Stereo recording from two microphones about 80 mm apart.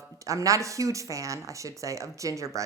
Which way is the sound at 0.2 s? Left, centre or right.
Right.